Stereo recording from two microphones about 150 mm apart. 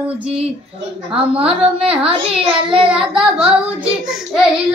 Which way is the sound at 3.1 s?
5° right (ahead or behind).